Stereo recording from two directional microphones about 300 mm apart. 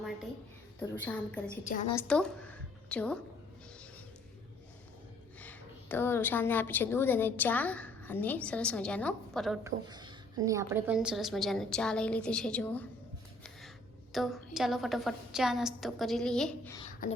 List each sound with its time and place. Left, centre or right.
0.8 s a woman's voice: centre
1.6 s a woman's voice: left
2.0 s a woman's voice: centre
5.4 s a woman's voice: centre
9.9 s a woman's voice: centre
14.1 s a woman's voice: centre
17.0 s a woman's voice: left